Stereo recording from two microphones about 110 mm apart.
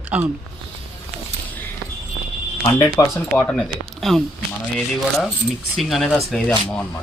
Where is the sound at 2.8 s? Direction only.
25° left (ahead or behind).